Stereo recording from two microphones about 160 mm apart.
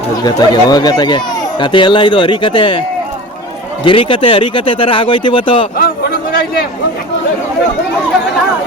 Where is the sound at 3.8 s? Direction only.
30° left (ahead or behind).